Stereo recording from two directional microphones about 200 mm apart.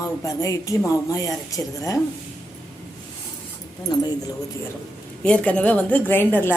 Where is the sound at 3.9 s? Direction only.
20° left (ahead or behind).